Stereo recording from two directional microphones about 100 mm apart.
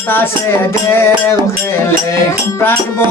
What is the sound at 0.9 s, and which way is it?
Music, 25° left (ahead or behind).